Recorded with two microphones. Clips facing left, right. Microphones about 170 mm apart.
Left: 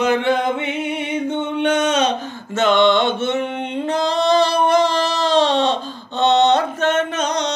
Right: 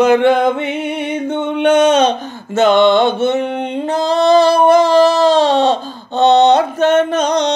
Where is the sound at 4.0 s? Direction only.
35° right (ahead or behind).